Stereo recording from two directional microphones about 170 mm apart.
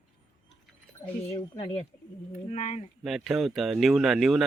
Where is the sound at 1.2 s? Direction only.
30° left (ahead or behind).